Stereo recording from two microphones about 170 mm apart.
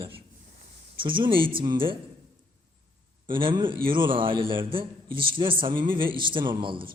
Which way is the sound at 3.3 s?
30° right (ahead or behind).